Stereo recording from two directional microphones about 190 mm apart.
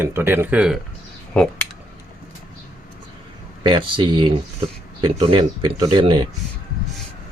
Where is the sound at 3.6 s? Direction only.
25° right (ahead or behind).